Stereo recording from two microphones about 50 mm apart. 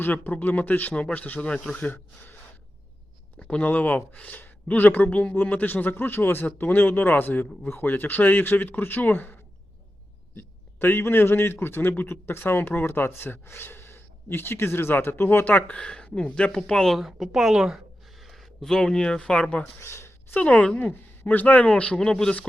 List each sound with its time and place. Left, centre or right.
0.0 s speech: left
3.4 s speech: left
6.4 s speech: left
10.3 s a man's voice: left
15.4 s speech: left; by 17.0 s centre
17.0 s a woman's voice: centre; by 19.7 s left
19.8 s speech: left
20.4 s a man's voice: left
21.9 s speech: centre